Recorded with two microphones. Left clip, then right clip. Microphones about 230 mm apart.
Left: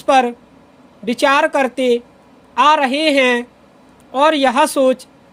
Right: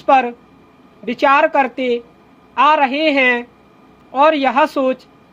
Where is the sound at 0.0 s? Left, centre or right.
Left.